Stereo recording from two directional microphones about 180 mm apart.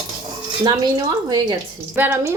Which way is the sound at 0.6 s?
25° right (ahead or behind).